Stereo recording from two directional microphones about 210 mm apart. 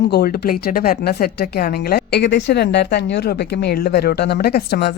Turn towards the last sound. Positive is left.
turn(degrees=50)  # may be behind; listen again after turning